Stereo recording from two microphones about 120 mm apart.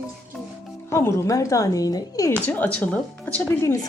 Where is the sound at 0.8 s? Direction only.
25° left (ahead or behind).